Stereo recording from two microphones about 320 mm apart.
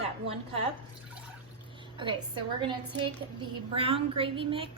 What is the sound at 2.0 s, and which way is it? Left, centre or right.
Speech, centre.